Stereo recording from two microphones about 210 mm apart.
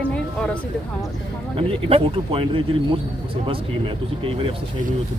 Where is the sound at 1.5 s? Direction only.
25° right (ahead or behind).